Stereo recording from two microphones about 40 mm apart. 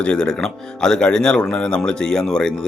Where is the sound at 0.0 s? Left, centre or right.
Left.